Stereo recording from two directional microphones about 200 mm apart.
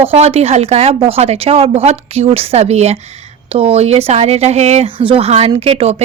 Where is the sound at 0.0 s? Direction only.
30° right (ahead or behind).